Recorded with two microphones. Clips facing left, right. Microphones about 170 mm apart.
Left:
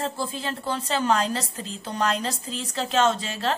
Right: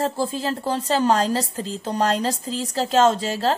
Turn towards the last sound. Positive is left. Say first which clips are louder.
# right 5 dB
turn(degrees=-35)  # may be behind; listen again after turning